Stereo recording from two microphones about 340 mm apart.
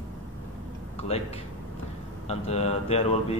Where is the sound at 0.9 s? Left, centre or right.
Centre.